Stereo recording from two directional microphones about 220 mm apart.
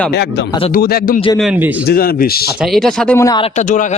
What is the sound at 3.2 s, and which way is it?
Speech, 15° left (ahead or behind).